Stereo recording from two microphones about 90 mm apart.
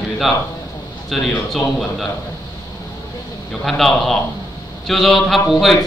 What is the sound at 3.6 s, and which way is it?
Speech, centre (ahead or behind).